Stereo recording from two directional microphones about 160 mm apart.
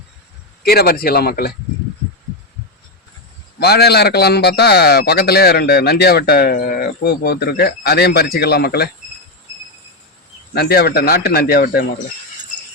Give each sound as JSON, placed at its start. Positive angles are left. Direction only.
{"t": 0.6, "sound": "speech", "side_deg": 75}
{"t": 3.6, "sound": "speech", "side_deg": 90}
{"t": 10.5, "sound": "speech", "side_deg": 80}